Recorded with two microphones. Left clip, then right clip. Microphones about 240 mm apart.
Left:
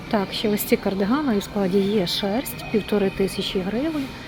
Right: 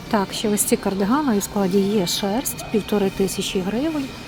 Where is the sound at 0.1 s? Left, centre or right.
Centre.